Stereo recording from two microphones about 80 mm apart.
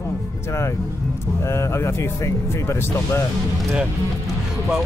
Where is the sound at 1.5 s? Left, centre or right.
Left.